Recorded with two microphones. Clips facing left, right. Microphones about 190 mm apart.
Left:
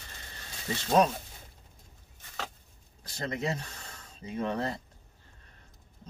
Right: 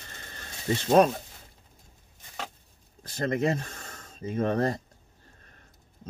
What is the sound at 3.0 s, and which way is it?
Speech, 55° right (ahead or behind).